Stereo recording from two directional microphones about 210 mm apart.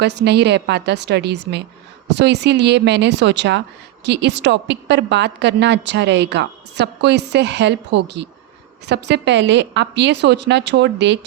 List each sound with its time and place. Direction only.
0.0 s a woman's voice: 55° right (ahead or behind)